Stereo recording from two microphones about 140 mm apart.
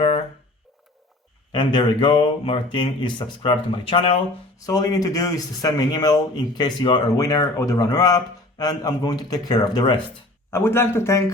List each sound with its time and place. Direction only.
1.5 s speech: 35° left (ahead or behind)
4.6 s speech: 25° left (ahead or behind)
10.5 s speech: 15° left (ahead or behind)